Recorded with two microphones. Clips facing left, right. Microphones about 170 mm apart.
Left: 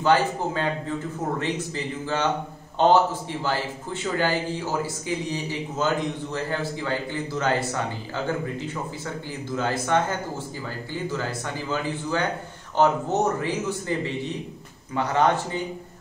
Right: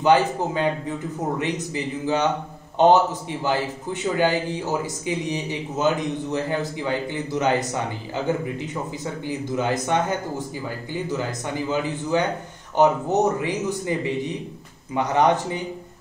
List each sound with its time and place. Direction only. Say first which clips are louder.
0.0 s a man's voice: right 3 dB; 15° right (ahead or behind)